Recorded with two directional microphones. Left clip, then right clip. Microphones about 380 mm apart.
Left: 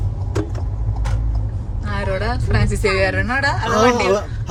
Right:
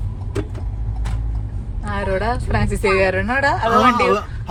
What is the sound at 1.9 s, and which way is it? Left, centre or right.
A woman's voice, centre.